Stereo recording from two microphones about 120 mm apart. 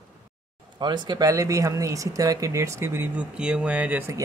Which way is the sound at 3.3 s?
10° right (ahead or behind).